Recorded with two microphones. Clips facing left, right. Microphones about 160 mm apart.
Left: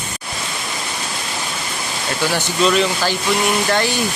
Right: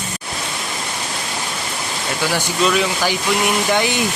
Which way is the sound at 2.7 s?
10° right (ahead or behind).